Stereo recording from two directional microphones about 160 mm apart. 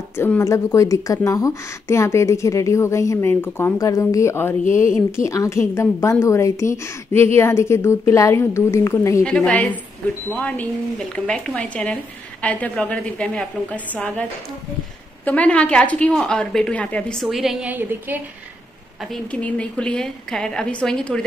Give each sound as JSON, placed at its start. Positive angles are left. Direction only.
{"t": 0.2, "sound": "speech", "side_deg": 15}
{"t": 9.2, "sound": "speech", "side_deg": 5}
{"t": 15.2, "sound": "a woman's voice", "side_deg": 10}
{"t": 19.3, "sound": "a woman's voice", "side_deg": 10}